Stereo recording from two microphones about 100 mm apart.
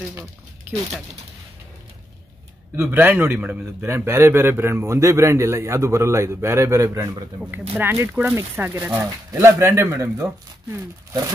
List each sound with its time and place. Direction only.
2.7 s a man's voice: 20° right (ahead or behind)
9.0 s a man's voice: 30° right (ahead or behind)